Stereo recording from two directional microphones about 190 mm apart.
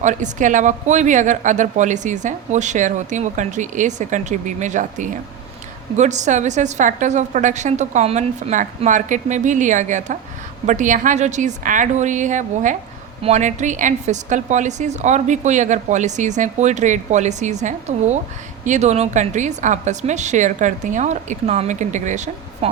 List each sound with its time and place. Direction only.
0.0 s speech: 40° right (ahead or behind)